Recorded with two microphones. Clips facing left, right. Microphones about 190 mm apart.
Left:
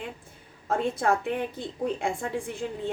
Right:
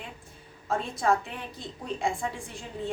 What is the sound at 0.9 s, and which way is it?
A woman's voice, 55° left (ahead or behind).